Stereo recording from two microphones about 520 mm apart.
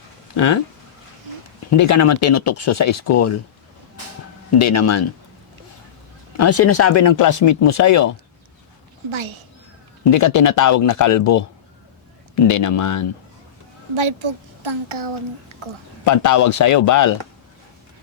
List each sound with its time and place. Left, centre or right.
0.3 s speech: left
1.7 s speech: left
4.5 s speech: left
6.3 s speech: left
9.0 s a child's voice: right
10.1 s speech: left
12.5 s speech: left
13.9 s a child's voice: right
16.0 s speech: left